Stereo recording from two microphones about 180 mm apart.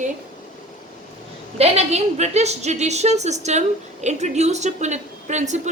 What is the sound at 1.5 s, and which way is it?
A woman's voice, 35° right (ahead or behind).